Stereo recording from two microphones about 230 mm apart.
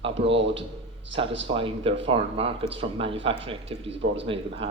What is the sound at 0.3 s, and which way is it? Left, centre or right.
Speech, right.